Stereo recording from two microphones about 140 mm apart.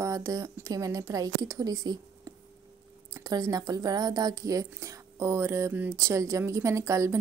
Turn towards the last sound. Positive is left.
turn(degrees=-20)  # may be behind; listen again after turning